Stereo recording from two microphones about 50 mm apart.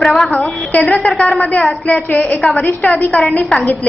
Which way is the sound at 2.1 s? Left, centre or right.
Left.